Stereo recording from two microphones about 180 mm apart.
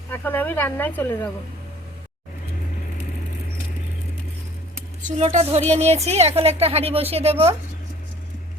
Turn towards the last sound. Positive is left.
turn(degrees=-35)  # may be behind; listen again after turning